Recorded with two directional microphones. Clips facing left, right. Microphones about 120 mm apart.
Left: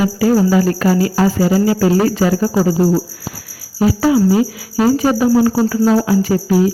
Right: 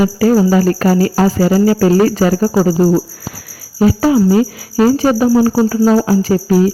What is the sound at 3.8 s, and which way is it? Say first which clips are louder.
Cricket: right 2 dB; 40° right (ahead or behind).